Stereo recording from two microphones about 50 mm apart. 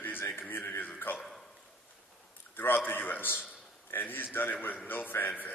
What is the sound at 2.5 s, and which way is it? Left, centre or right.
A man's voice, left.